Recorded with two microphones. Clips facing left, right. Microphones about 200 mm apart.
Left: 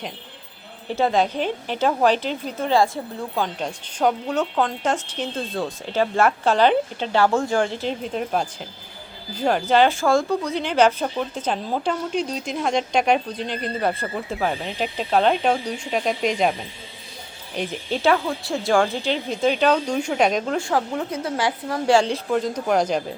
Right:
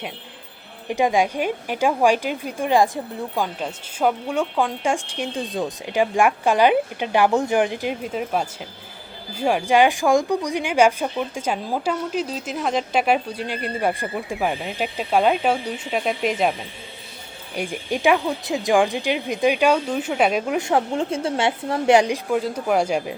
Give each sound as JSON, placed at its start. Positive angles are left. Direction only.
{"t": 0.9, "sound": "a woman's voice", "side_deg": -15}
{"t": 20.6, "sound": "a woman's voice", "side_deg": -25}